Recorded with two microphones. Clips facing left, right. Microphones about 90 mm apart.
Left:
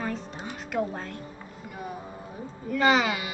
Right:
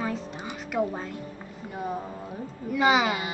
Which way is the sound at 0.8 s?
5° right (ahead or behind).